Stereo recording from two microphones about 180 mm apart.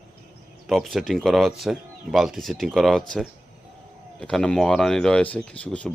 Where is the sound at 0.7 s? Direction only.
Centre (ahead or behind).